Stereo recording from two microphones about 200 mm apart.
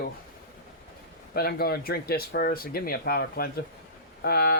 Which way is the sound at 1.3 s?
50° left (ahead or behind).